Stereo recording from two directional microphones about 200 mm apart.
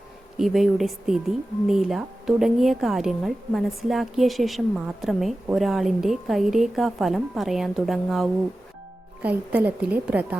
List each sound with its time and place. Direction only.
0.3 s a woman's voice: centre (ahead or behind)